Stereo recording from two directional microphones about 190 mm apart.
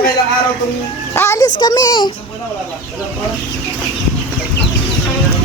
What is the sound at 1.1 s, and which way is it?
Speech, 15° left (ahead or behind).